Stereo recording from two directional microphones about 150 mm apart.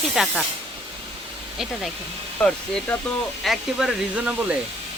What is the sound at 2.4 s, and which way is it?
Speech, 5° left (ahead or behind).